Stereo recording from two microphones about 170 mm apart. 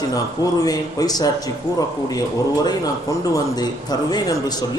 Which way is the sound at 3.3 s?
25° left (ahead or behind).